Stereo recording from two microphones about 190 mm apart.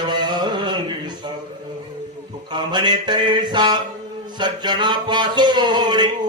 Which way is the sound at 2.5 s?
25° right (ahead or behind).